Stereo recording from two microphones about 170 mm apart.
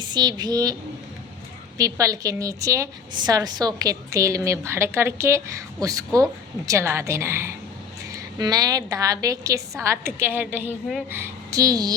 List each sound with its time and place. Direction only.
0.0 s a woman's voice: 25° right (ahead or behind)
1.8 s a woman's voice: 20° right (ahead or behind)